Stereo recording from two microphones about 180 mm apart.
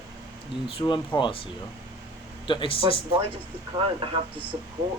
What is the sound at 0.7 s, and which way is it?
Speech, 25° left (ahead or behind).